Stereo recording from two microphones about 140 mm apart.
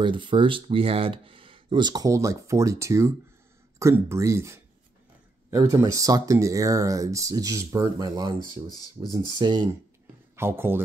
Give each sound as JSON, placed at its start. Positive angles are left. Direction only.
{"t": 0.0, "sound": "speech", "side_deg": -35}
{"t": 10.3, "sound": "speech", "side_deg": -15}